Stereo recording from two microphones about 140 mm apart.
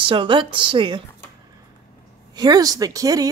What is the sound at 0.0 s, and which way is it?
Speech, 35° right (ahead or behind).